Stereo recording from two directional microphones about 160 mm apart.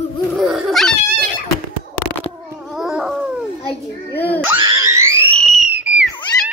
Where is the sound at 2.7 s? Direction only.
5° right (ahead or behind).